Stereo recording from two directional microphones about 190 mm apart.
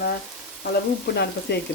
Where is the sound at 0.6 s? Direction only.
60° left (ahead or behind).